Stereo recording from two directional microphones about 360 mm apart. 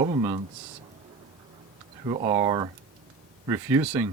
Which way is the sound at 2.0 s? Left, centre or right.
Centre.